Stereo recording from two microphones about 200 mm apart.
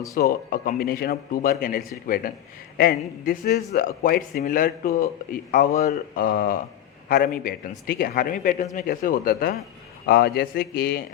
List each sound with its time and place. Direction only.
0.2 s speech: 50° left (ahead or behind)
6.2 s speech: 50° left (ahead or behind)